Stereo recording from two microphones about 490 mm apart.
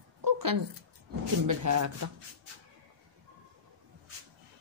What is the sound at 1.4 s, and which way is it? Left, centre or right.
Speech, right.